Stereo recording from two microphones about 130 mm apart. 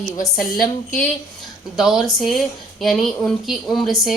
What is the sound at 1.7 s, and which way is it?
A woman's voice, 5° right (ahead or behind).